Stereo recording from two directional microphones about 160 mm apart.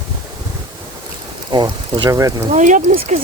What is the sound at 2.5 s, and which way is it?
Speech, 50° right (ahead or behind).